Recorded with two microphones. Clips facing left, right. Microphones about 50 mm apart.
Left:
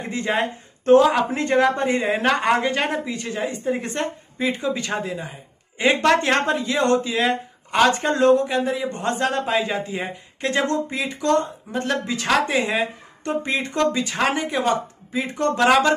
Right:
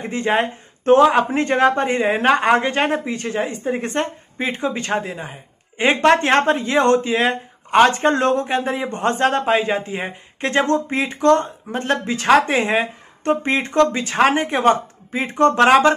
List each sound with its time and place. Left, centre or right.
0.0 s speech: right